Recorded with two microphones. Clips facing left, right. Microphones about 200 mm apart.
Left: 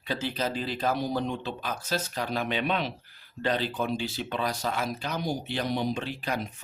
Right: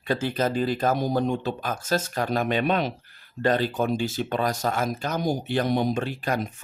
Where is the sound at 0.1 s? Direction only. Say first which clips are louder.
Right 6 dB; 50° right (ahead or behind).